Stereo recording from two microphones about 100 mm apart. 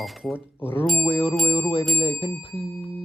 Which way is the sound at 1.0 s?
65° left (ahead or behind).